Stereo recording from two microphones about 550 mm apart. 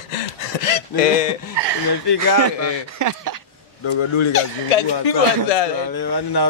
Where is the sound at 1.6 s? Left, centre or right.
Right.